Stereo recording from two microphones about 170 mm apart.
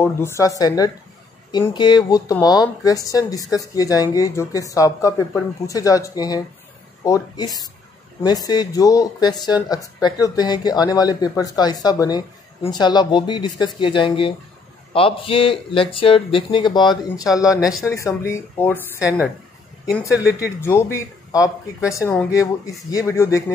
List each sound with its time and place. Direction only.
0.0 s speech: 15° left (ahead or behind)
18.9 s speech: 5° right (ahead or behind)
20.6 s speech: 15° left (ahead or behind)